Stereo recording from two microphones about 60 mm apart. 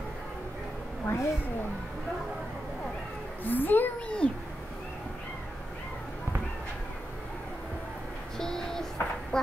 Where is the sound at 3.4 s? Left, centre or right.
Left.